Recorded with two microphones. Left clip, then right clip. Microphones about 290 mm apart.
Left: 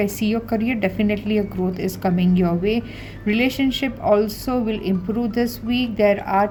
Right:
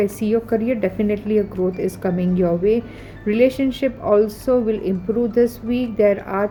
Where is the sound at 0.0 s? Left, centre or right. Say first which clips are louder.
Right 3 dB; left.